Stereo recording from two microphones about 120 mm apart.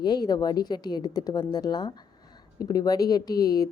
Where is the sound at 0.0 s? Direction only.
35° left (ahead or behind).